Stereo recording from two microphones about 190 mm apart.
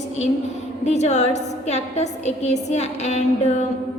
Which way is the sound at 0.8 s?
35° left (ahead or behind).